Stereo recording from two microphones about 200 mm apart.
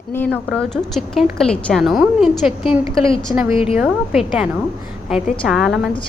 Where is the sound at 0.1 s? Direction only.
10° left (ahead or behind).